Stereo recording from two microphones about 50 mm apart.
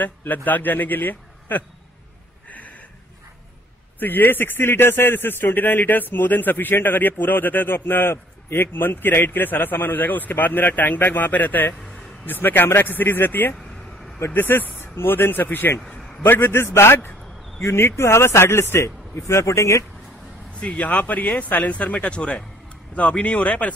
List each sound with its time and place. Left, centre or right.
0.0 s a man's voice: left
4.0 s a man's voice: left
17.9 s a man's voice: left
20.6 s speech: left